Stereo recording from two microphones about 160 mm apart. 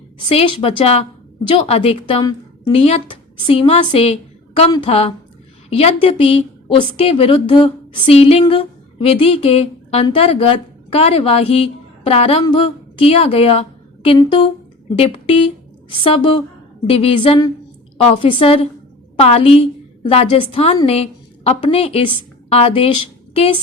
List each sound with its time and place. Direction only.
0.3 s a woman's voice: 40° left (ahead or behind)